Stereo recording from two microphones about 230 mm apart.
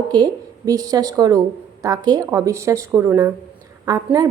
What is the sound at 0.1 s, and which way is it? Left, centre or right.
Speech, centre.